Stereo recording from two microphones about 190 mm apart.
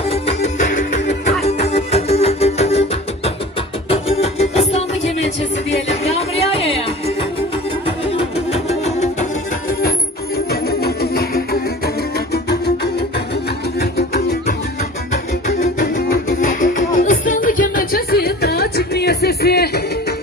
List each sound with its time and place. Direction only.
0.1 s music: 35° left (ahead or behind)
3.9 s music: 35° left (ahead or behind)
8.1 s music: 30° left (ahead or behind)
10.5 s music: 55° left (ahead or behind)
15.4 s music: 50° left (ahead or behind)